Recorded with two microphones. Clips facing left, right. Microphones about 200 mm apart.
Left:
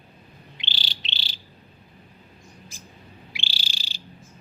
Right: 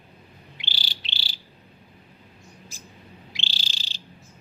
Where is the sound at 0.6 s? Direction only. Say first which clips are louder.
Left 1 dB; 25° left (ahead or behind).